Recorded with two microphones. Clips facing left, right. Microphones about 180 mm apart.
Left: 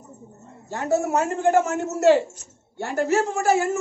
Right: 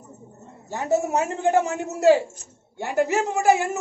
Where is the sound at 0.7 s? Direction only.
15° right (ahead or behind).